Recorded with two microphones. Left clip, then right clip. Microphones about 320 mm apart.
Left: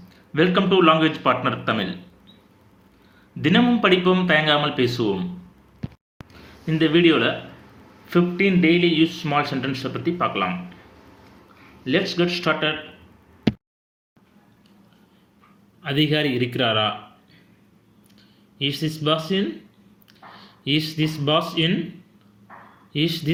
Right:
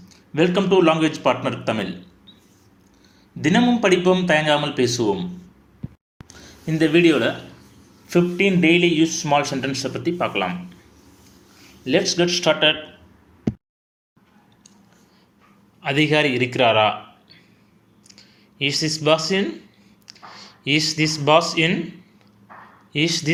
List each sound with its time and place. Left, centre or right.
0.3 s speech: centre
3.4 s speech: centre
6.2 s a sound: centre
6.7 s speech: right
12.1 s speech: right
15.8 s speech: centre
18.1 s a sound: centre
21.5 s speech: centre
22.9 s speech: centre